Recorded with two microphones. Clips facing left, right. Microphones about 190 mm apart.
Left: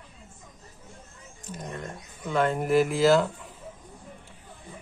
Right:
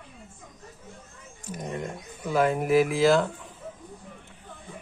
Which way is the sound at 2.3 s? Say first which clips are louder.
Right 1 dB; 5° right (ahead or behind).